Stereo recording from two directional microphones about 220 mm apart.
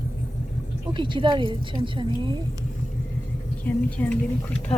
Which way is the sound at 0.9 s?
20° right (ahead or behind).